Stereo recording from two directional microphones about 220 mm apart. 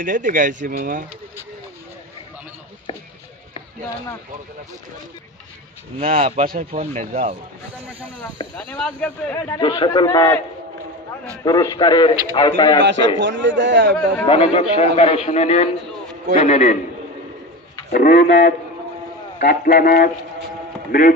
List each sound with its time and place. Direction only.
0.0 s speech: 40° right (ahead or behind)
5.9 s speech: 30° right (ahead or behind)
8.5 s a man's voice: 5° left (ahead or behind)
11.4 s a man's voice: 15° left (ahead or behind)
13.2 s a man's voice: 55° right (ahead or behind)
14.2 s a man's voice: 25° left (ahead or behind)
17.9 s a man's voice: 35° left (ahead or behind)